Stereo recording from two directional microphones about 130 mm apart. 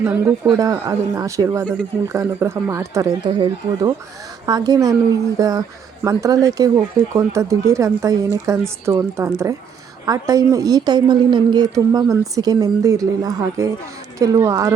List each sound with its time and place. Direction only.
0.0 s a woman's voice: 10° right (ahead or behind)
0.5 s speech: 25° right (ahead or behind)